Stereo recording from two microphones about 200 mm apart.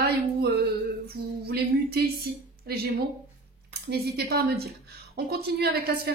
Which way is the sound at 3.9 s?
55° right (ahead or behind).